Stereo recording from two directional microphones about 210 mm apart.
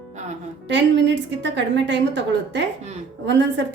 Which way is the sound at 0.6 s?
60° right (ahead or behind).